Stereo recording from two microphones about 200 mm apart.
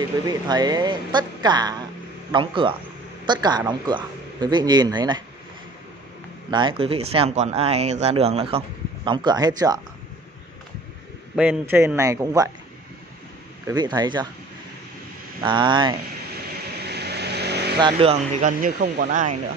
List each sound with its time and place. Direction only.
0.2 s speech: 20° right (ahead or behind)
6.5 s speech: 25° right (ahead or behind)
11.3 s a man's voice: 10° right (ahead or behind)
13.7 s speech: 20° right (ahead or behind)
15.4 s speech: 25° right (ahead or behind)
16.8 s vehicle: 55° right (ahead or behind)
17.7 s speech: 25° right (ahead or behind); by 19.3 s 45° right (ahead or behind)